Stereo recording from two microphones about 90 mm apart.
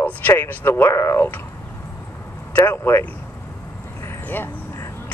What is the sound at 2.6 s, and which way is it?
Speech, 25° left (ahead or behind).